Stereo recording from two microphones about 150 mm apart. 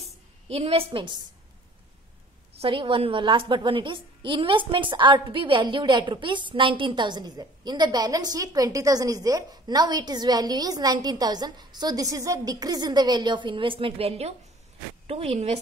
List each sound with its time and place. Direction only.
0.5 s a woman's voice: 40° right (ahead or behind)
2.5 s a woman's voice: 35° right (ahead or behind)